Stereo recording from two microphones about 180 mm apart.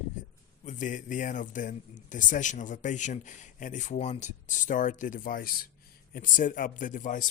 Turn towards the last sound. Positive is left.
turn(degrees=45)  # may be behind; listen again after turning